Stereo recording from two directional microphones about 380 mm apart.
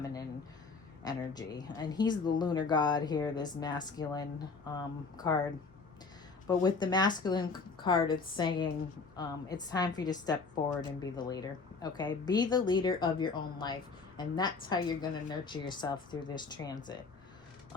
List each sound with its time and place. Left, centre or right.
1.0 s speech: centre
6.5 s speech: centre